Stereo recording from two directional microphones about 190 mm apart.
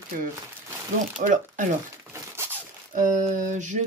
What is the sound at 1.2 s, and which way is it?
Speech, 40° right (ahead or behind).